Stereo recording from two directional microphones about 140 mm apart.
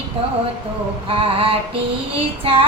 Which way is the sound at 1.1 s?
40° right (ahead or behind).